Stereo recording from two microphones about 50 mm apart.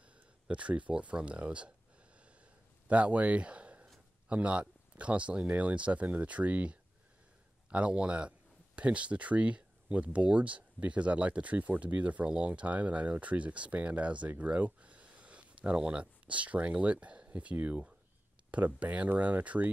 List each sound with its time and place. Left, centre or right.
0.0 s speech: right
2.9 s speech: right